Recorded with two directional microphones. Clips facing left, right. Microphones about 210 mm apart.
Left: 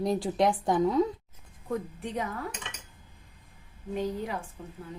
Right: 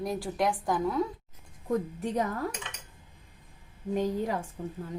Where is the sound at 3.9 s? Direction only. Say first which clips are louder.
Right 3 dB; 45° right (ahead or behind).